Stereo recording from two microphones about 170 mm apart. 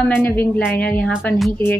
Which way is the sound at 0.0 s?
10° left (ahead or behind).